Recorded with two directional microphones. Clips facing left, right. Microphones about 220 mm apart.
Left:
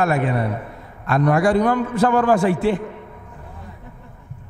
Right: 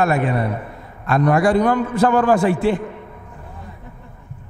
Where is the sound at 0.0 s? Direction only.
20° right (ahead or behind).